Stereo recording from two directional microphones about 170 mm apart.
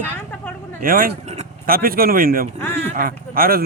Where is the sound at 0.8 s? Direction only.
55° right (ahead or behind).